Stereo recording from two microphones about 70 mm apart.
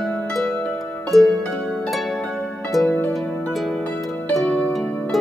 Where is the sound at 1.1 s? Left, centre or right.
Centre.